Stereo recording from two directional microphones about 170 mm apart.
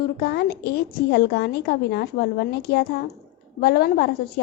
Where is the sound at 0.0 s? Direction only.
70° left (ahead or behind).